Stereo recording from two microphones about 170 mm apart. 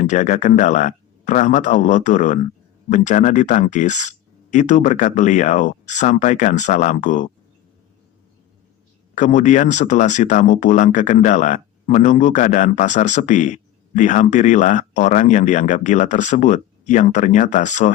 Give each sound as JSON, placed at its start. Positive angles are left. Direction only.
{"t": 0.0, "sound": "a man's voice", "side_deg": 45}
{"t": 9.1, "sound": "a man's voice", "side_deg": 45}